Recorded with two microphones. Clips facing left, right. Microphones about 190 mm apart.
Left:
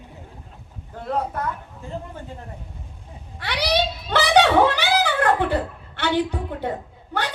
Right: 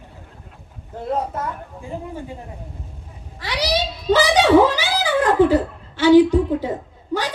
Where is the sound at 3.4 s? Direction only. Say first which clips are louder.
Even; 60° left (ahead or behind).